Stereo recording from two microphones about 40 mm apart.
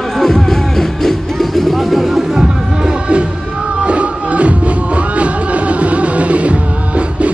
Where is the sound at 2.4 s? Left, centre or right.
Right.